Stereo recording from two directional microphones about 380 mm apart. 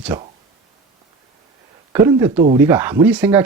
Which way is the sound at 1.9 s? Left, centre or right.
Centre.